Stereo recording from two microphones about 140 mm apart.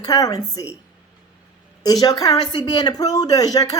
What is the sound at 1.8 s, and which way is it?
A woman's voice, 30° left (ahead or behind).